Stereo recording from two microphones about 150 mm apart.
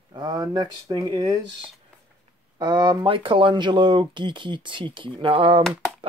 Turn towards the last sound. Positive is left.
turn(degrees=-35)  # may be behind; listen again after turning